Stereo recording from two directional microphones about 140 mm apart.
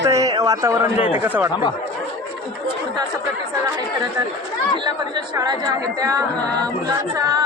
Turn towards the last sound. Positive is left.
turn(degrees=-25)  # may be behind; listen again after turning